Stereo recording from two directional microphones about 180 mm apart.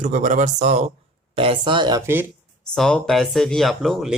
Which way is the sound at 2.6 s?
5° left (ahead or behind).